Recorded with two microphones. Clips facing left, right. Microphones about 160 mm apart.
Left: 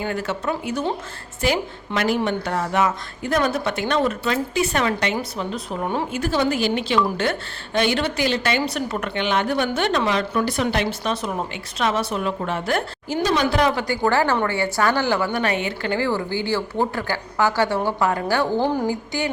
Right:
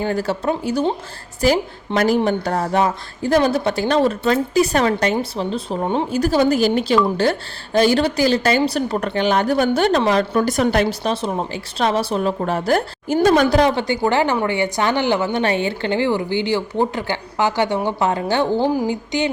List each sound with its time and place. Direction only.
0.0 s a woman's voice: 35° right (ahead or behind)
6.1 s a woman's voice: 40° right (ahead or behind)
11.1 s a woman's voice: 30° right (ahead or behind)
13.2 s a woman's voice: 50° right (ahead or behind)
13.6 s a woman's voice: 30° right (ahead or behind)
18.6 s a woman's voice: 10° right (ahead or behind)
18.9 s a woman's voice: 20° right (ahead or behind)